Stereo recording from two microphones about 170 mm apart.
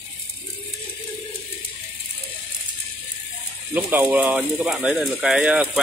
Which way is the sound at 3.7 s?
10° right (ahead or behind).